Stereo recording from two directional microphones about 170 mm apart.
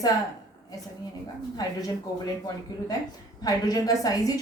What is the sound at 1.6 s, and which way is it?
A woman's voice, 20° left (ahead or behind).